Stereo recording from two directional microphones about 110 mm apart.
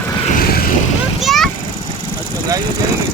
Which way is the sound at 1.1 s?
Centre (ahead or behind).